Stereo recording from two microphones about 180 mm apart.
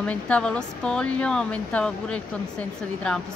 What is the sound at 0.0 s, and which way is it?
Speech, 5° left (ahead or behind).